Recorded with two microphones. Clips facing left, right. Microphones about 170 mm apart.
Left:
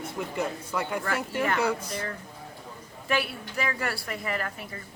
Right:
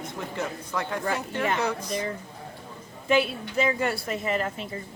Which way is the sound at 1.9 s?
15° right (ahead or behind).